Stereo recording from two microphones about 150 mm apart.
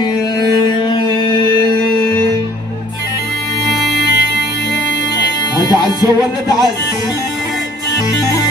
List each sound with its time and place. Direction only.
0.7 s music: 30° left (ahead or behind)
5.6 s music: 25° left (ahead or behind)